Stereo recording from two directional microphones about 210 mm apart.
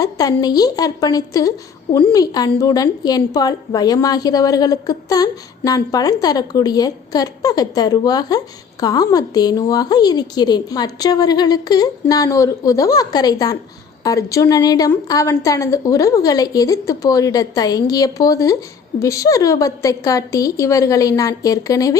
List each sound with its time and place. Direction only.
0.0 s a woman's voice: 15° left (ahead or behind)